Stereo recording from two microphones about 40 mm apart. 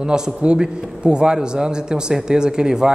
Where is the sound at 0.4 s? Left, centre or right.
Right.